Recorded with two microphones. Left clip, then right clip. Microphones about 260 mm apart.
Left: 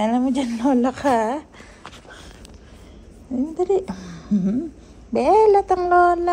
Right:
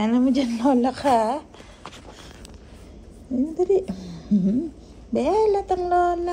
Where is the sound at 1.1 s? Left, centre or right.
Left.